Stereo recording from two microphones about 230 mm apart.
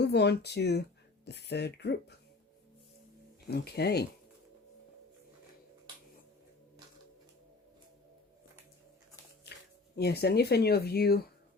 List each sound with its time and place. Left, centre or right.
0.0 s speech: left
3.5 s speech: left
9.9 s speech: left